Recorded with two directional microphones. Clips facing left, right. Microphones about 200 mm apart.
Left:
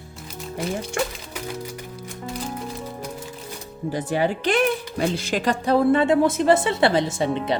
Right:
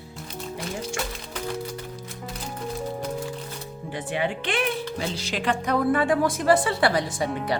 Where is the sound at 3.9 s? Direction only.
40° left (ahead or behind).